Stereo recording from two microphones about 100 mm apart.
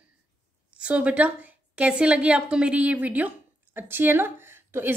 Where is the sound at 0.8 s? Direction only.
10° right (ahead or behind).